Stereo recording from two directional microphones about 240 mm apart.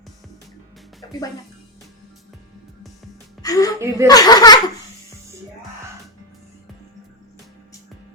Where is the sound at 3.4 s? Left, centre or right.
Centre.